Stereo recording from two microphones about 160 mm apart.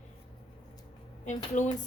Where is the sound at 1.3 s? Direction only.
45° left (ahead or behind).